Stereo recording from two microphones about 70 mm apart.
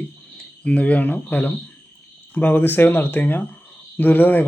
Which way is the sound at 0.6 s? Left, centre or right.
Centre.